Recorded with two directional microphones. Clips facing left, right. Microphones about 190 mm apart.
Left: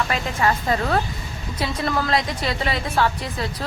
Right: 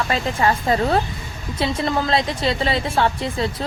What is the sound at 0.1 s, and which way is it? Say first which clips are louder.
A woman's voice: right 2 dB; 30° right (ahead or behind).